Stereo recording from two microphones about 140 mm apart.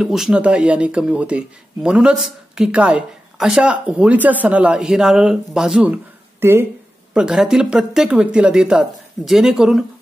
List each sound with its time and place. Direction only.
0.0 s speech: 5° right (ahead or behind)
6.4 s speech: 15° right (ahead or behind)
7.2 s speech: 5° right (ahead or behind)